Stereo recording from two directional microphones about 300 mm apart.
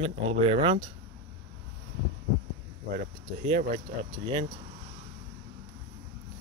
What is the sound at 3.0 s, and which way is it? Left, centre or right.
Speech, right.